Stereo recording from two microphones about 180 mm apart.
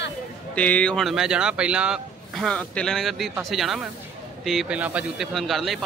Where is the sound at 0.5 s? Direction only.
5° left (ahead or behind).